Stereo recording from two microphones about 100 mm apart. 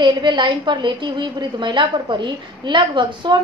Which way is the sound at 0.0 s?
50° right (ahead or behind).